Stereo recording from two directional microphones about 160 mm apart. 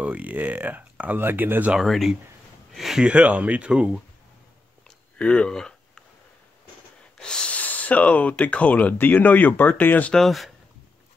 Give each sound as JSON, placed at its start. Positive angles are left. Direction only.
{"t": 0.0, "sound": "speech", "side_deg": -10}
{"t": 4.8, "sound": "a sound", "side_deg": 5}
{"t": 7.2, "sound": "speech", "side_deg": 5}